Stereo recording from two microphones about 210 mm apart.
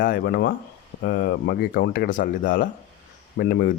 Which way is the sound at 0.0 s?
45° left (ahead or behind).